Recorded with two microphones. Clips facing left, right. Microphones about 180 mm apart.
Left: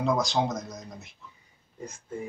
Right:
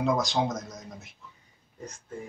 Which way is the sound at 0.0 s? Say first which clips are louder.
Even; centre (ahead or behind).